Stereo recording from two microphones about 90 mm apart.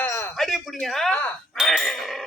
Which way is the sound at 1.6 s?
Centre (ahead or behind).